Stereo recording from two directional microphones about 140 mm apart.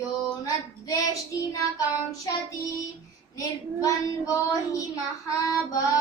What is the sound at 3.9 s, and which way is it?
Child singing, 25° left (ahead or behind).